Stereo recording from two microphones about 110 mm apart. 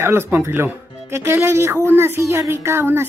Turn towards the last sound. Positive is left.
turn(degrees=-20)  # may be behind; listen again after turning